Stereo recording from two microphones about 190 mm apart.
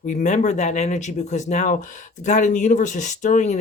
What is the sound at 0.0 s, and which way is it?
Speech, 40° left (ahead or behind).